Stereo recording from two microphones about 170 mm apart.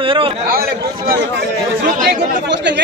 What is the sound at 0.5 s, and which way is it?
Speech, 60° right (ahead or behind).